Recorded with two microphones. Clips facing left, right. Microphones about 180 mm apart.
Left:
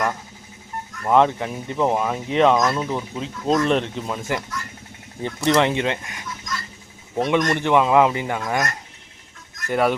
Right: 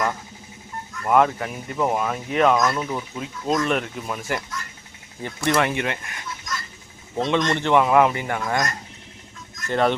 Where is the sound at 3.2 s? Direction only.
30° left (ahead or behind).